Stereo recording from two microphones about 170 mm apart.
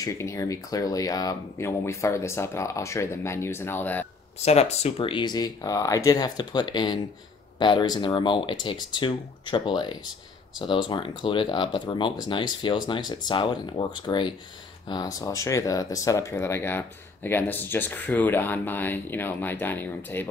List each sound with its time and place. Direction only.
0.0 s speech: 20° left (ahead or behind)
4.4 s speech: 40° left (ahead or behind); by 20.2 s 10° left (ahead or behind)